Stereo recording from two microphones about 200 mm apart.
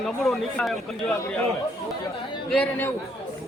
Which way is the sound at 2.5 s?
5° left (ahead or behind).